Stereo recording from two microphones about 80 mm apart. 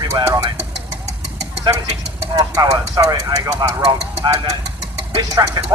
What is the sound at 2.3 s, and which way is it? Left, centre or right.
Speech, right.